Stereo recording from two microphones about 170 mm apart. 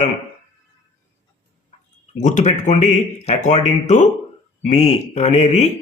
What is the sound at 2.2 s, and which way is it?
Speech, 45° left (ahead or behind).